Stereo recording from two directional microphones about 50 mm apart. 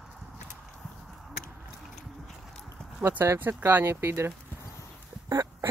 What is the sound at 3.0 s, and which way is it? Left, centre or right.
Speech, right.